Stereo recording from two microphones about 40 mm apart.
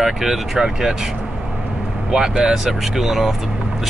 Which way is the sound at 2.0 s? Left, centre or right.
Centre.